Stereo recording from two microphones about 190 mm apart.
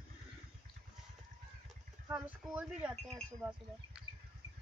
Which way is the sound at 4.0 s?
5° right (ahead or behind).